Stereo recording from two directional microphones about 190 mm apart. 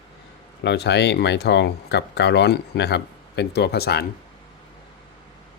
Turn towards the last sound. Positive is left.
turn(degrees=55)  # may be behind; listen again after turning